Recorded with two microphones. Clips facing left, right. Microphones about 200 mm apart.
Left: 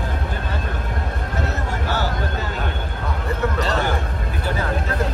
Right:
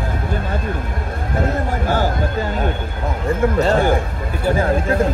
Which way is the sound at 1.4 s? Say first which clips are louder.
Right 7 dB; 50° right (ahead or behind).